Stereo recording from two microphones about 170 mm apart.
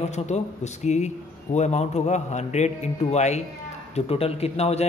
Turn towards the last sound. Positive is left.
turn(degrees=40)  # may be behind; listen again after turning